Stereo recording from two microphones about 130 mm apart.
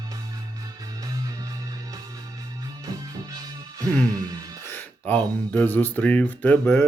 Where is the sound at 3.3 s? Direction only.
25° right (ahead or behind).